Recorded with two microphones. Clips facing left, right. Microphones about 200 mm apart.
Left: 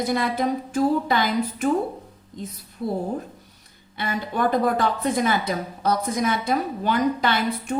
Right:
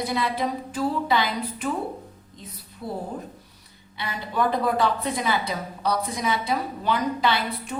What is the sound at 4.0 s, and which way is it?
A woman's voice, 50° left (ahead or behind).